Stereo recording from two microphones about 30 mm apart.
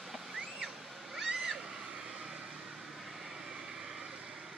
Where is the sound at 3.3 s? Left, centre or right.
Centre.